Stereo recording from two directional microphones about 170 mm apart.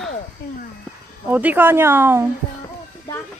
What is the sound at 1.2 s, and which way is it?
Speech, 10° right (ahead or behind).